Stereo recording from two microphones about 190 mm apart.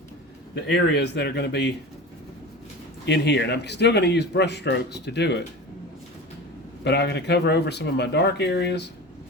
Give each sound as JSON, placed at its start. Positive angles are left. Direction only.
{"t": 0.5, "sound": "speech", "side_deg": 60}
{"t": 3.1, "sound": "speech", "side_deg": 65}
{"t": 6.8, "sound": "speech", "side_deg": 60}